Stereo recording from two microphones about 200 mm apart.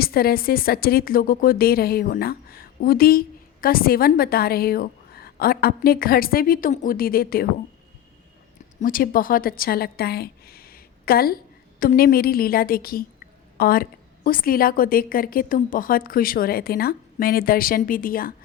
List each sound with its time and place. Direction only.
0.0 s a woman's voice: 50° left (ahead or behind)
8.8 s a woman's voice: 45° left (ahead or behind)